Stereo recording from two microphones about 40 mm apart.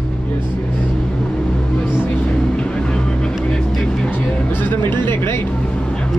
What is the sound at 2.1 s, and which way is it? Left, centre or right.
Vehicle, left.